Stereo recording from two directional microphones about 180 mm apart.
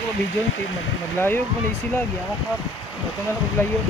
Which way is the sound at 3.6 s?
10° left (ahead or behind).